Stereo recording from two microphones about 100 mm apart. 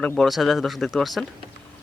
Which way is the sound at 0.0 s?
Centre (ahead or behind).